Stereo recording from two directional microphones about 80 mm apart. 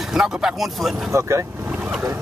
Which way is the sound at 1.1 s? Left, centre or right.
Right.